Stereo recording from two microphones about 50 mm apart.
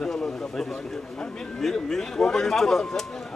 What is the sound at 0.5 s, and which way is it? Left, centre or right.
Speech, centre.